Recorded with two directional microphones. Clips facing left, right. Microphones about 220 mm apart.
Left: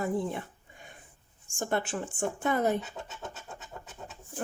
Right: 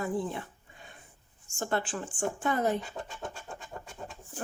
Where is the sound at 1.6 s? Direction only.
20° left (ahead or behind).